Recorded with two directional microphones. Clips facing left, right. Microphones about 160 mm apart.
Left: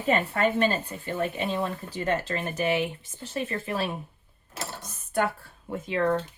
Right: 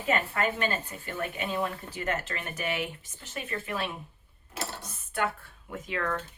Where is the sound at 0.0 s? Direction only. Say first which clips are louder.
Left 4 dB; 35° left (ahead or behind).